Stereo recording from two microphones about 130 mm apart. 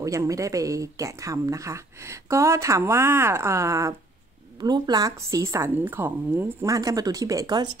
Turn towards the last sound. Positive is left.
turn(degrees=-30)  # may be behind; listen again after turning